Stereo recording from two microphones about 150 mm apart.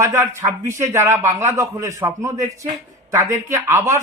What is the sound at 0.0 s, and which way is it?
A man's voice, 15° right (ahead or behind).